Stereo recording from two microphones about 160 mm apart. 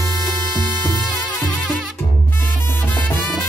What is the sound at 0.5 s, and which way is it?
Music, 25° right (ahead or behind).